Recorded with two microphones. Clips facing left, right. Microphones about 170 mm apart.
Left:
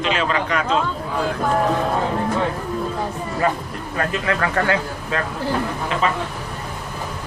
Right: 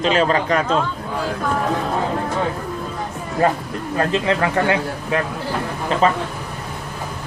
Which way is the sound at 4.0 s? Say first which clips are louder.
Right 3 dB; 25° right (ahead or behind).